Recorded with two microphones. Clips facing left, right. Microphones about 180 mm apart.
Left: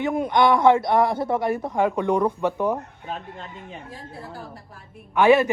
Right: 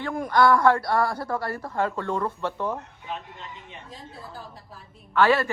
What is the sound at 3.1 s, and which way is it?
Speech, 40° left (ahead or behind).